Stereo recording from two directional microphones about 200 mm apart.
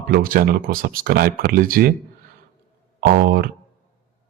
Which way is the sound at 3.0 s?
50° right (ahead or behind).